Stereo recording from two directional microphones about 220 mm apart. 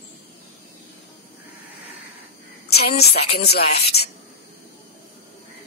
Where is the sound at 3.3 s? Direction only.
45° left (ahead or behind).